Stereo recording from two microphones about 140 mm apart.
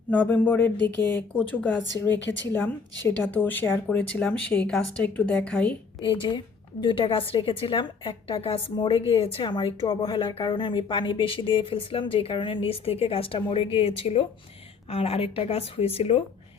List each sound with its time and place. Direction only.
0.1 s speech: 15° left (ahead or behind)
6.0 s a woman's voice: 35° left (ahead or behind)